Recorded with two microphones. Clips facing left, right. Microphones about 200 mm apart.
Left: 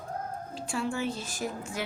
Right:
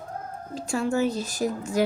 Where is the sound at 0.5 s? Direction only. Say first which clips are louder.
Right 8 dB; 45° right (ahead or behind).